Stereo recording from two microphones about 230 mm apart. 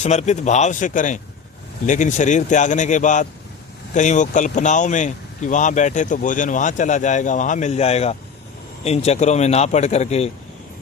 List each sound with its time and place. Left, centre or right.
0.0 s speech: left